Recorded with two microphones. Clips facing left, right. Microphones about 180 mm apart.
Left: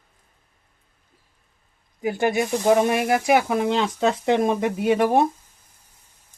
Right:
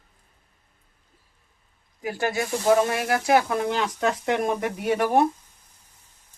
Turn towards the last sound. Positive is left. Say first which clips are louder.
# left 3 dB
turn(degrees=20)  # may be behind; listen again after turning